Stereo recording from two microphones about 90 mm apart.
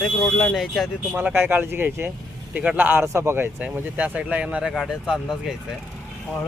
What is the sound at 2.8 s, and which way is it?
Speech, 25° right (ahead or behind).